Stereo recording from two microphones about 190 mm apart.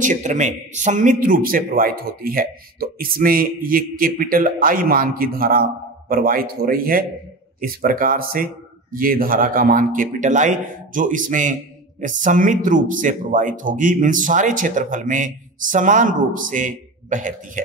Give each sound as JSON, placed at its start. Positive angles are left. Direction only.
{"t": 0.0, "sound": "a man's voice", "side_deg": -40}